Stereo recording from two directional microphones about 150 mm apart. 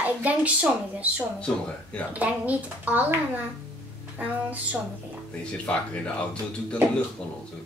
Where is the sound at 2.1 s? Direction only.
10° right (ahead or behind).